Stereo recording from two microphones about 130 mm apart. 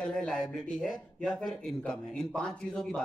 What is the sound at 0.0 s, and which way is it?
Speech, 5° left (ahead or behind).